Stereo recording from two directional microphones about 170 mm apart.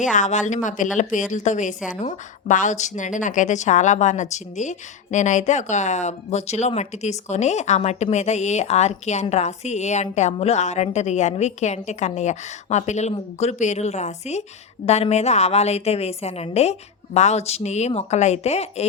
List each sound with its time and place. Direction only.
0.0 s a woman's voice: 45° left (ahead or behind)